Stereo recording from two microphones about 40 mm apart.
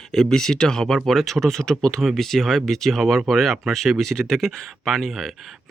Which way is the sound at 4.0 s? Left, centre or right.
Centre.